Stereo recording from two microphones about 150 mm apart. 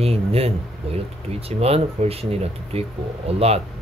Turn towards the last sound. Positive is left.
turn(degrees=-45)  # may be behind; listen again after turning